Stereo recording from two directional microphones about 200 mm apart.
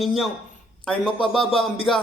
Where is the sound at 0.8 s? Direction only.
25° left (ahead or behind).